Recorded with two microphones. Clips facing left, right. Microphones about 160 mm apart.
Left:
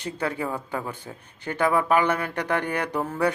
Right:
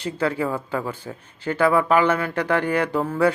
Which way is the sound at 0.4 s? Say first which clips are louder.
Right 4 dB; 15° left (ahead or behind).